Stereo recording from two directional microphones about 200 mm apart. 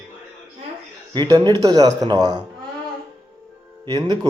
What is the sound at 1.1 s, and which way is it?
Speech, 20° right (ahead or behind).